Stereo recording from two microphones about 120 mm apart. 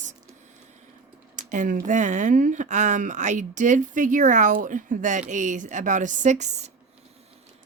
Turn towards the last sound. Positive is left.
turn(degrees=-70)  # may be behind; listen again after turning